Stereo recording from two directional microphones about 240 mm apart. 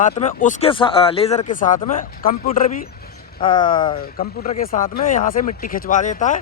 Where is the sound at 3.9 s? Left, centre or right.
Left.